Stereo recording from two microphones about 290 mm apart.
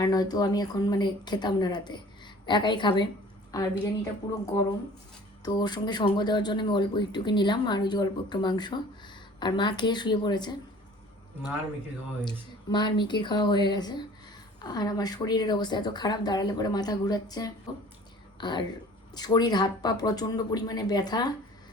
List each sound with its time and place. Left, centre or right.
0.0 s speech: centre
12.2 s speech: centre